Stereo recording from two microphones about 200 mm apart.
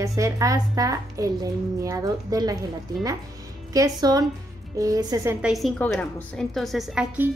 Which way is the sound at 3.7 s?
20° right (ahead or behind).